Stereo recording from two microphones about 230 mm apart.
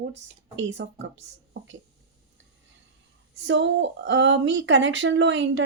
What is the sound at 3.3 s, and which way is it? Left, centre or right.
Speech, right.